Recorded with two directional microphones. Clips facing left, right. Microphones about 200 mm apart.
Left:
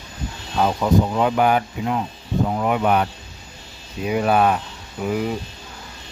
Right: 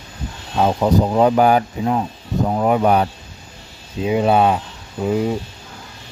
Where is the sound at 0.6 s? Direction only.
30° right (ahead or behind).